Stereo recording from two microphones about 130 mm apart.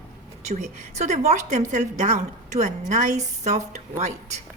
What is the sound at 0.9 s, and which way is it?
A woman's voice, 65° right (ahead or behind).